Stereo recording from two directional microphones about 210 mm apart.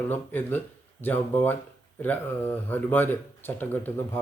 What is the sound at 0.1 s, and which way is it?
Speech, 10° left (ahead or behind).